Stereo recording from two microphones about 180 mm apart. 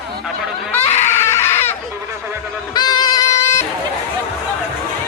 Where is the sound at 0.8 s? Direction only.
35° left (ahead or behind).